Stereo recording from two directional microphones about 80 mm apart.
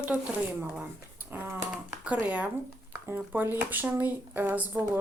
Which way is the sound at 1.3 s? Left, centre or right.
Right.